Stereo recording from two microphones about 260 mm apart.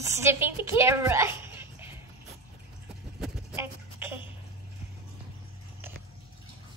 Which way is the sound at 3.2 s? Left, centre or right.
Centre.